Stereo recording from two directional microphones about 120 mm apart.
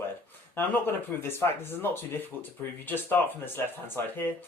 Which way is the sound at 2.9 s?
15° left (ahead or behind).